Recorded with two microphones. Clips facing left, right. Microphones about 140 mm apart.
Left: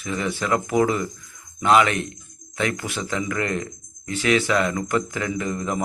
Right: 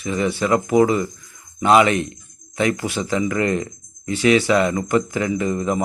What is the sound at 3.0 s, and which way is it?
Speech, 15° right (ahead or behind).